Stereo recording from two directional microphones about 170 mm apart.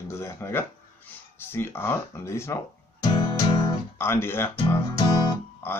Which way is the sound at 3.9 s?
15° left (ahead or behind).